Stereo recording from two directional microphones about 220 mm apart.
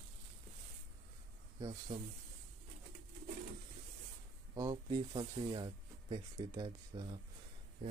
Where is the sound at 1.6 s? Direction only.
15° right (ahead or behind).